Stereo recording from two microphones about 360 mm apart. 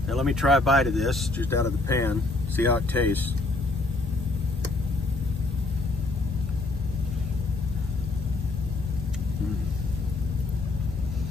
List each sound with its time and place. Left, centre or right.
0.1 s speech: centre